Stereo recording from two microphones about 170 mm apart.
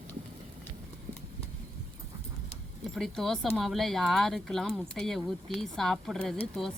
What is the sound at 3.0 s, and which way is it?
Speech, centre (ahead or behind).